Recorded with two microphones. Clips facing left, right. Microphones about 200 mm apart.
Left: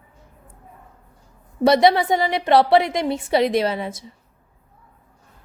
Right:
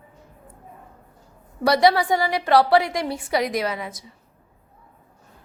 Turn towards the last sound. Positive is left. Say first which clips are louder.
# left 5 dB
turn(degrees=30)  # may be behind; listen again after turning